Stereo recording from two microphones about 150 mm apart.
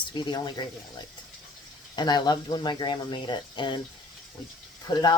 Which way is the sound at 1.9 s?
30° left (ahead or behind).